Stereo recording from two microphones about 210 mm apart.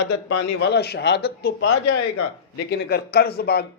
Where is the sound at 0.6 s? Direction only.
55° left (ahead or behind).